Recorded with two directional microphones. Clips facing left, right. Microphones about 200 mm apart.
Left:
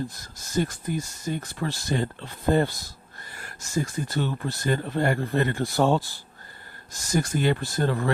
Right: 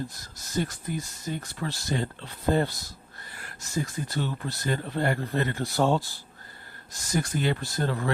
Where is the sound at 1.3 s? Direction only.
50° left (ahead or behind).